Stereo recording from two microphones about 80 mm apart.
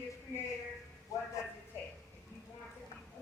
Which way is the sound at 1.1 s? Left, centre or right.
Left.